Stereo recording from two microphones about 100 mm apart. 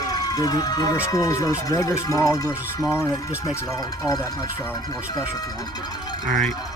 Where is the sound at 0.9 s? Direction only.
35° left (ahead or behind).